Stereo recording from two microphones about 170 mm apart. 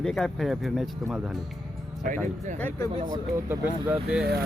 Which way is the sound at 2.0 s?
50° right (ahead or behind).